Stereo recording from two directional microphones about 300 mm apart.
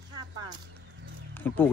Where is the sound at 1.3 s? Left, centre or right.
Centre.